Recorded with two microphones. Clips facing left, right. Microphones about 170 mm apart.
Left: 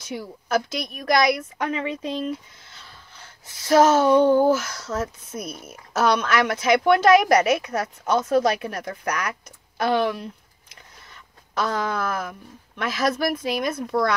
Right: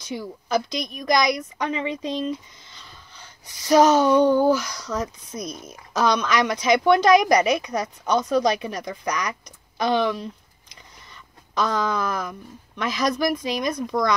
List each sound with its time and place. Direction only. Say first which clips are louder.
0.0 s a woman's voice: right 1 dB; 5° left (ahead or behind)
3.5 s speech: even; 20° right (ahead or behind)
3.8 s a woman's voice: left 1 dB; centre (ahead or behind)
9.8 s a sound: even; 5° left (ahead or behind)
11.5 s a woman's voice: right 1 dB; 5° left (ahead or behind)